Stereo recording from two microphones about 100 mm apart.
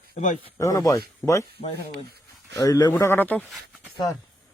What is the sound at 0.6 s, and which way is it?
Speech, 35° left (ahead or behind).